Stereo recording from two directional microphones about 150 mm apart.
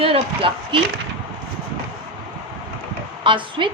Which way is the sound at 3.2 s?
35° right (ahead or behind).